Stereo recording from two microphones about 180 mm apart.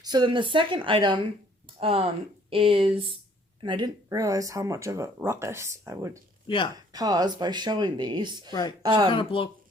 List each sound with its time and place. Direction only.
0.0 s speech: 25° right (ahead or behind)
9.0 s speech: 30° left (ahead or behind)